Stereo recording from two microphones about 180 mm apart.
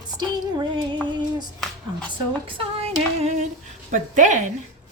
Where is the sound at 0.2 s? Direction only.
25° right (ahead or behind).